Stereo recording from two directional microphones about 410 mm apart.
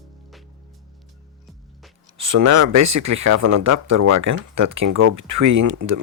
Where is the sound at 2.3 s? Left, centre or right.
Right.